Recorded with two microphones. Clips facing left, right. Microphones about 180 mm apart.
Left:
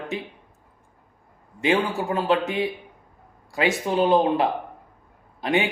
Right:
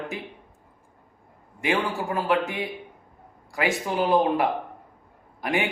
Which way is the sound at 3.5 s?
25° left (ahead or behind).